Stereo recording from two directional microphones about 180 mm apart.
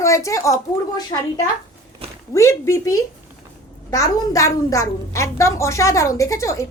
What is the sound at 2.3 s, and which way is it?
A woman's voice, 15° left (ahead or behind).